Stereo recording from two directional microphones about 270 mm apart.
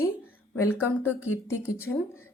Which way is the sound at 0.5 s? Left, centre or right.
Centre.